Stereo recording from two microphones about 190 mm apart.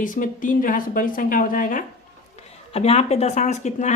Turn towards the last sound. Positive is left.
turn(degrees=40)  # may be behind; listen again after turning